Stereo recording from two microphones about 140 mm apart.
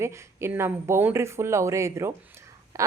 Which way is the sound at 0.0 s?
20° right (ahead or behind).